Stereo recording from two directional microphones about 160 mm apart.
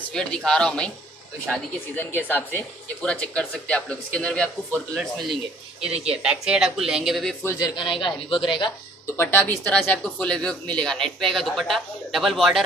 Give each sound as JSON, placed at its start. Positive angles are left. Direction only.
{"t": 0.1, "sound": "speech", "side_deg": 5}
{"t": 7.4, "sound": "speech", "side_deg": 25}
{"t": 9.0, "sound": "speech", "side_deg": 15}